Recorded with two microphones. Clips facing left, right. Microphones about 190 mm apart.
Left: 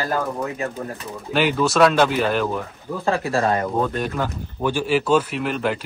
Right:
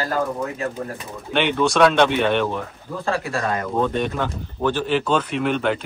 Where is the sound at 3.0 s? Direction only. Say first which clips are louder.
Left 3 dB; 25° left (ahead or behind).